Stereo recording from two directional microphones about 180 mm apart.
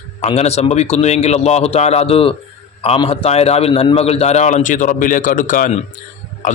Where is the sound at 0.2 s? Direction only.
35° left (ahead or behind).